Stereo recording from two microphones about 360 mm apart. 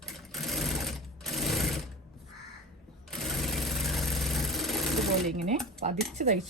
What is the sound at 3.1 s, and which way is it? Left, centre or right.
Sewing machine, centre.